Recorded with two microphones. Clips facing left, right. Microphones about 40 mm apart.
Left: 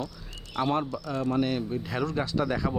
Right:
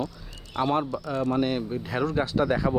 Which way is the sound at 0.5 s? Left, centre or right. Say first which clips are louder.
Right 2 dB; centre.